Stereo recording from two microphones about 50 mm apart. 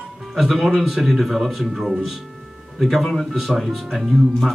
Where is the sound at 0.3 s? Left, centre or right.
Centre.